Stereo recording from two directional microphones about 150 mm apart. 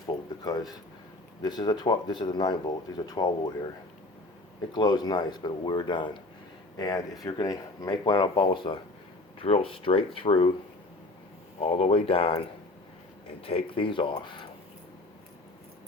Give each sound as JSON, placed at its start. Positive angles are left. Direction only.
{"t": 0.0, "sound": "a sound", "side_deg": 25}
{"t": 1.4, "sound": "speech", "side_deg": 30}
{"t": 4.7, "sound": "speech", "side_deg": 30}
{"t": 11.6, "sound": "speech", "side_deg": 40}
{"t": 13.4, "sound": "speech", "side_deg": 40}